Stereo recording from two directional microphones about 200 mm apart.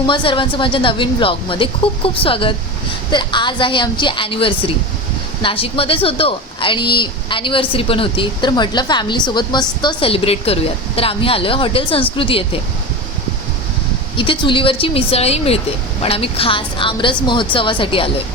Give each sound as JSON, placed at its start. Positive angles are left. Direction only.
{"t": 0.1, "sound": "speech", "side_deg": 25}
{"t": 14.2, "sound": "speech", "side_deg": 25}